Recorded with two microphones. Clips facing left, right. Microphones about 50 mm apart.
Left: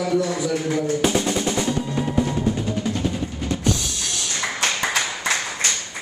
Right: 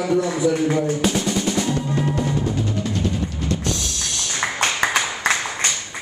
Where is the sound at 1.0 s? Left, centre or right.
Centre.